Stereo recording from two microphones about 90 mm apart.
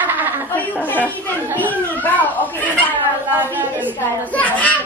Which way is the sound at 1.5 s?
20° left (ahead or behind).